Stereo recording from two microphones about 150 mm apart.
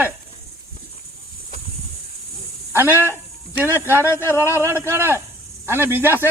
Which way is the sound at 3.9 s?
15° left (ahead or behind).